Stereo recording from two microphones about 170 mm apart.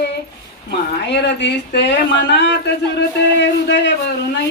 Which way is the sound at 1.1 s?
90° left.